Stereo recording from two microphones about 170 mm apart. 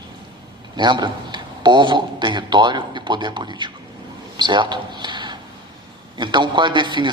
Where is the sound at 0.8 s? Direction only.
25° right (ahead or behind).